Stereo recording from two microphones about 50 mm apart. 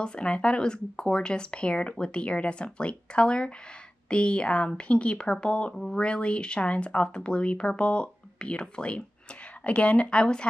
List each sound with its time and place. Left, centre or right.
0.0 s speech: left
5.8 s speech: centre
6.0 s speech: left